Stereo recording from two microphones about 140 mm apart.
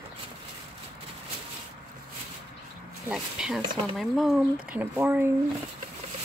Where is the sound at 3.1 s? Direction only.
5° right (ahead or behind).